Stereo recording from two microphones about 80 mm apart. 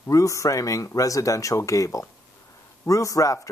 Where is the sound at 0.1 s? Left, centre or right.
Left.